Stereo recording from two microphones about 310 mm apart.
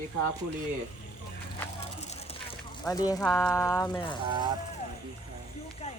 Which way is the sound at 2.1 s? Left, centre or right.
Centre.